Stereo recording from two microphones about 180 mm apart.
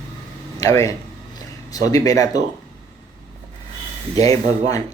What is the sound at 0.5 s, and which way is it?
Speech, 20° left (ahead or behind).